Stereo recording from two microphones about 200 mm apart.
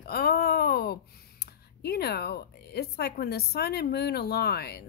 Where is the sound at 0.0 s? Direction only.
50° left (ahead or behind).